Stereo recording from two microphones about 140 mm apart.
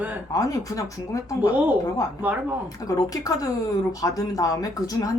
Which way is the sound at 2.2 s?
10° right (ahead or behind).